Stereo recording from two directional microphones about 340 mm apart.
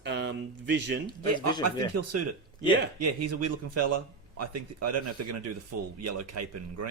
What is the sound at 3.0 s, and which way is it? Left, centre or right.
Speech, right.